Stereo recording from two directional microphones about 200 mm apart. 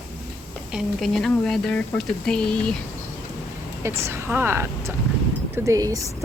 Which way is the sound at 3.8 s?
15° right (ahead or behind).